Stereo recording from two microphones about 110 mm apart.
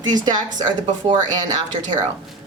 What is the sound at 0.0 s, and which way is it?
Speech, 40° right (ahead or behind).